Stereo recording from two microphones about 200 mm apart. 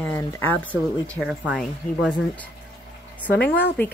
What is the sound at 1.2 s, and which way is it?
Speech, 5° right (ahead or behind).